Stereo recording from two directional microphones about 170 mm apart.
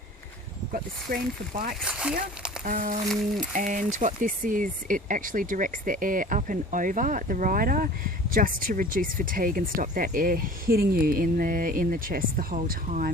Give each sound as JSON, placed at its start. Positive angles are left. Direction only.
{"t": 0.7, "sound": "speech", "side_deg": -55}
{"t": 1.9, "sound": "speech", "side_deg": -5}
{"t": 2.6, "sound": "speech", "side_deg": -50}